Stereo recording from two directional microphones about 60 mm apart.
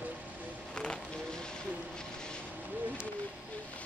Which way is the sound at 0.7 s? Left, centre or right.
Centre.